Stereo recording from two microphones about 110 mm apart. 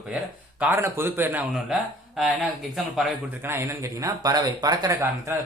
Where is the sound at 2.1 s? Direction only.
5° right (ahead or behind).